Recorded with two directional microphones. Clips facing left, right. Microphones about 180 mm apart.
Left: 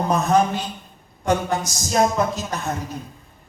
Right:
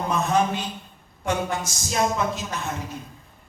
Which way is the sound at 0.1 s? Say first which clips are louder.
Left 3 dB; 40° left (ahead or behind).